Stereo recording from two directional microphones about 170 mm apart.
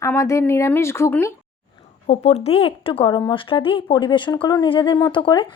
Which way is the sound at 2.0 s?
40° left (ahead or behind).